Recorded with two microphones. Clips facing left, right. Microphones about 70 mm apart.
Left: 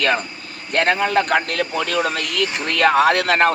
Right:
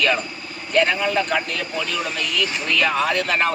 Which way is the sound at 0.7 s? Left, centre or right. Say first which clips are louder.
Left 1 dB; left.